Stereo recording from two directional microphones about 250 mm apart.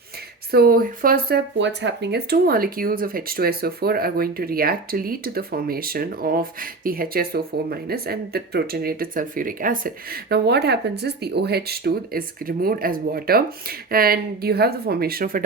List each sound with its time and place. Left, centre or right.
0.5 s speech: right